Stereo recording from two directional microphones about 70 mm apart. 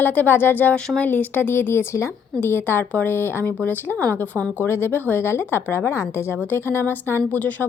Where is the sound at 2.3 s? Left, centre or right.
Left.